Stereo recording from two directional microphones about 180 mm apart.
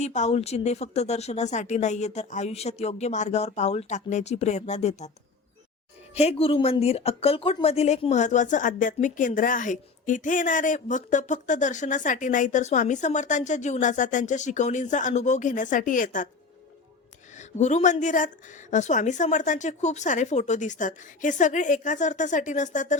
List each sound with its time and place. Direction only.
0.0 s speech: 40° left (ahead or behind)
6.1 s speech: 35° left (ahead or behind)
17.3 s speech: 40° left (ahead or behind)